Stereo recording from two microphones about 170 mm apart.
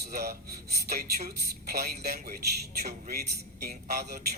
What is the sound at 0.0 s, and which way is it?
Speech, 65° right (ahead or behind).